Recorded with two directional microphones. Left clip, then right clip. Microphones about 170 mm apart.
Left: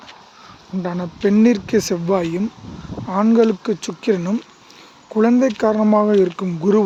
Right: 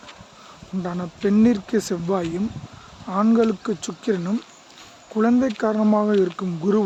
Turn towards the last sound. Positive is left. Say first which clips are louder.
# left 5 dB
turn(degrees=15)  # may be behind; listen again after turning